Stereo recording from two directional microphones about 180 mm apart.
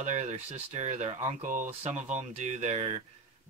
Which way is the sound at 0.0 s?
40° right (ahead or behind).